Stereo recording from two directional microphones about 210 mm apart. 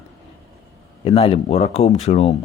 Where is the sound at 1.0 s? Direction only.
25° left (ahead or behind).